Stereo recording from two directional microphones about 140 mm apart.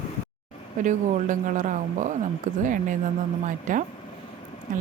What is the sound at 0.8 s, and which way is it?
Speech, 65° right (ahead or behind).